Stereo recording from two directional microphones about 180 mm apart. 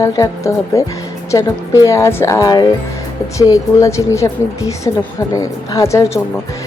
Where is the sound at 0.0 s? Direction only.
20° left (ahead or behind).